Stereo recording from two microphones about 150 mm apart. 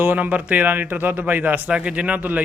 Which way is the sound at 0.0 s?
10° right (ahead or behind).